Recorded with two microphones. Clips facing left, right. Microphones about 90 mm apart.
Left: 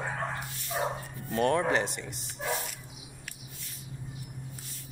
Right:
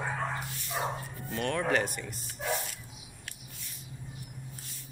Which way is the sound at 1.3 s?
30° left (ahead or behind).